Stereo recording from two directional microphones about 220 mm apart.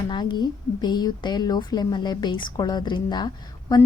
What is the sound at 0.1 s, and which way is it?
A woman's voice, 20° left (ahead or behind).